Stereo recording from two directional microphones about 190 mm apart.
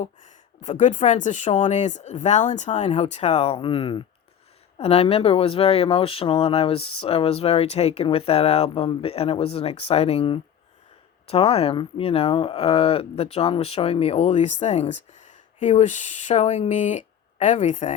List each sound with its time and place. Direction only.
0.0 s speech: 40° left (ahead or behind)